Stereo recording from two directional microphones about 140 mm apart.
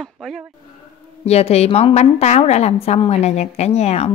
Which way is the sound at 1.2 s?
50° left (ahead or behind).